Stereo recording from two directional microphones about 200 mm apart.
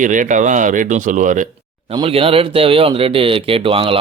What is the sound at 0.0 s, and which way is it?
Speech, 40° right (ahead or behind).